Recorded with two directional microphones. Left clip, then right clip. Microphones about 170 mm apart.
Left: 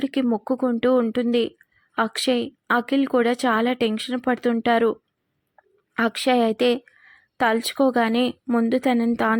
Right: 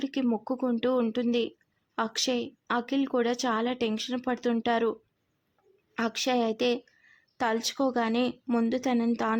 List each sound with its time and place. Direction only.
0.0 s a woman's voice: 20° left (ahead or behind)